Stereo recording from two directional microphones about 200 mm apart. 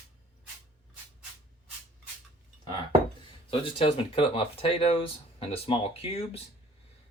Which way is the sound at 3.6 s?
25° left (ahead or behind).